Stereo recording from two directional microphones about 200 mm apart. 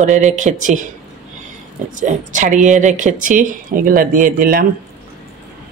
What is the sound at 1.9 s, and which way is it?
Speech, 40° right (ahead or behind).